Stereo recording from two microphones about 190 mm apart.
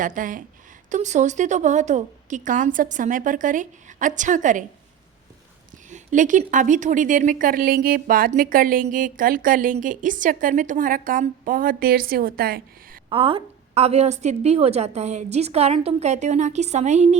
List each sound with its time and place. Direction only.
0.0 s a woman's voice: 45° right (ahead or behind)
5.9 s a woman's voice: 40° right (ahead or behind)
13.1 s a woman's voice: 30° right (ahead or behind)